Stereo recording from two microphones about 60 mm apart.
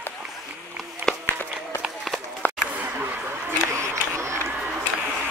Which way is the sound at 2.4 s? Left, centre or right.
Left.